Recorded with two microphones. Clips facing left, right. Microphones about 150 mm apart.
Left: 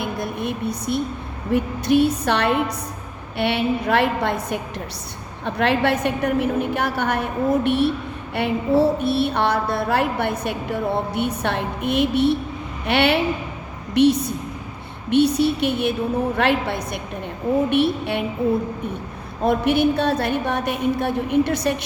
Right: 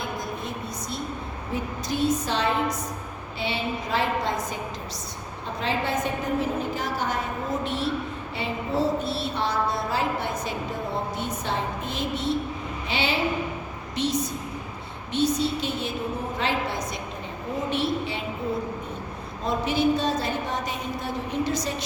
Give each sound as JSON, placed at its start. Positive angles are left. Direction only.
{"t": 0.0, "sound": "a sound", "side_deg": 65}
{"t": 1.5, "sound": "a woman's voice", "side_deg": 65}
{"t": 19.4, "sound": "a woman's voice", "side_deg": 60}